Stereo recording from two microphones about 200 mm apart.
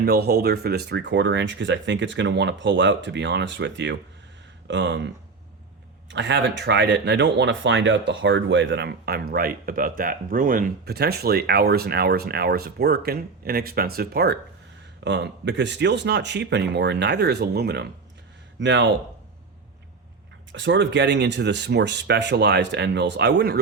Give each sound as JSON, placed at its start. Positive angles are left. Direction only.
{"t": 0.0, "sound": "speech", "side_deg": -55}
{"t": 20.5, "sound": "speech", "side_deg": -65}